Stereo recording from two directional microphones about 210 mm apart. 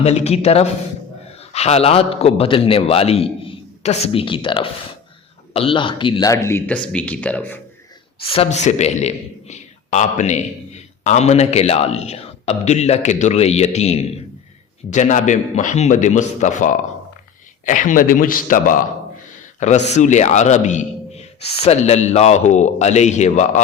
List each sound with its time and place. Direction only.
0.0 s a man's voice: 30° left (ahead or behind); by 7.6 s 5° left (ahead or behind)
8.2 s a man's voice: 25° left (ahead or behind)